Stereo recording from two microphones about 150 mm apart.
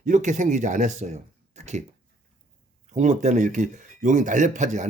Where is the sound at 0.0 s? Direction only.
55° right (ahead or behind).